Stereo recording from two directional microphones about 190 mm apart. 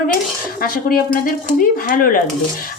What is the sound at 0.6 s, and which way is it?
Speech, 50° left (ahead or behind).